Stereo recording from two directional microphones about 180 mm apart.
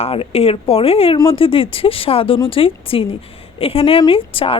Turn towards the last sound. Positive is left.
turn(degrees=30)  # may be behind; listen again after turning